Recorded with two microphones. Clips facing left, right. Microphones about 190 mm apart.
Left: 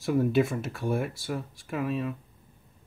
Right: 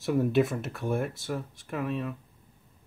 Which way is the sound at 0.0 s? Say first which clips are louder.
Even; centre (ahead or behind).